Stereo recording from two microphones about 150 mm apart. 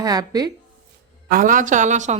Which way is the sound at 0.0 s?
25° right (ahead or behind).